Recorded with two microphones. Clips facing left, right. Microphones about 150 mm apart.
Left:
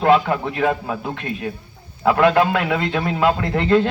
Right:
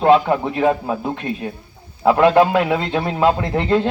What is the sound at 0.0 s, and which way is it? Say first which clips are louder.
A man's voice: right 2 dB; 20° right (ahead or behind).